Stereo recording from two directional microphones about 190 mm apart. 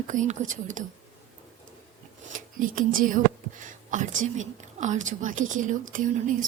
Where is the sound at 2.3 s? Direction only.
45° right (ahead or behind).